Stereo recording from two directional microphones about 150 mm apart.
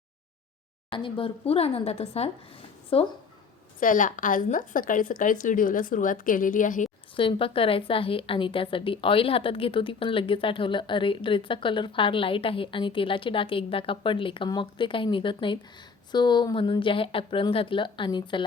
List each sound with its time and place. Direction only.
0.9 s a woman's voice: 35° left (ahead or behind)
3.8 s a woman's voice: 60° left (ahead or behind)
7.2 s a woman's voice: 35° left (ahead or behind)